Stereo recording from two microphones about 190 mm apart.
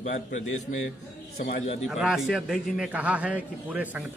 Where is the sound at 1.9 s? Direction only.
Centre (ahead or behind).